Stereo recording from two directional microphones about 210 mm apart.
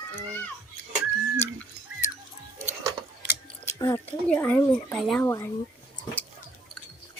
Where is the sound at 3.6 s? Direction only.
15° left (ahead or behind).